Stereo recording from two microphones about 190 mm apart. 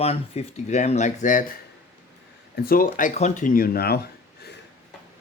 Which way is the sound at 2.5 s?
50° left (ahead or behind).